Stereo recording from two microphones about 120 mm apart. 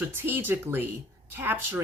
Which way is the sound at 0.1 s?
20° right (ahead or behind).